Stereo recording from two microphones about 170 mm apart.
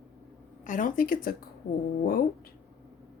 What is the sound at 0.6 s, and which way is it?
Speech, 50° left (ahead or behind).